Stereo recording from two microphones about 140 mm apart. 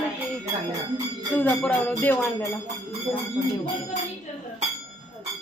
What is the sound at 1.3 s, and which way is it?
A woman's voice, 10° left (ahead or behind).